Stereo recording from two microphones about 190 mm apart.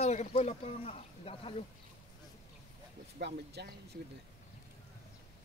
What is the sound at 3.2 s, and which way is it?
Speech, 60° right (ahead or behind).